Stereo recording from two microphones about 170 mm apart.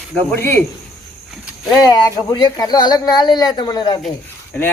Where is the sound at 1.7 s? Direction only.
20° left (ahead or behind).